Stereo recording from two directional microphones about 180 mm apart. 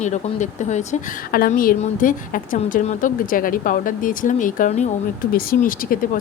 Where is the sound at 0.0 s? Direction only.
40° left (ahead or behind).